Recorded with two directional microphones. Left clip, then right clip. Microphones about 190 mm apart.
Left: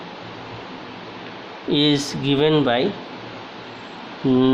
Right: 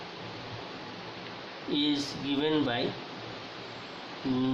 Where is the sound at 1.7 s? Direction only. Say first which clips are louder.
Left 11 dB; 50° left (ahead or behind).